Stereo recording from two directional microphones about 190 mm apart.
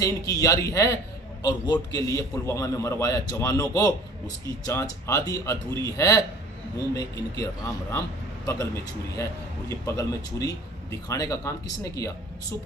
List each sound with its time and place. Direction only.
0.0 s a man's voice: 15° left (ahead or behind)
9.1 s a man's voice: 15° left (ahead or behind)